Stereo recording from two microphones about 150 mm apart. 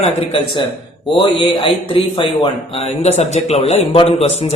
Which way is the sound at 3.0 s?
45° left (ahead or behind).